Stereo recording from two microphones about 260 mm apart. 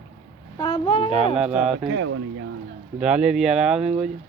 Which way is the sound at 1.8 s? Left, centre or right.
Right.